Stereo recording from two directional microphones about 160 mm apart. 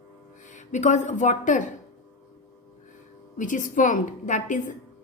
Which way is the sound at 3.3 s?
55° left (ahead or behind).